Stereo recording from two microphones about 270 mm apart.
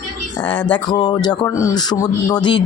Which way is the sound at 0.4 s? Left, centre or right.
Centre.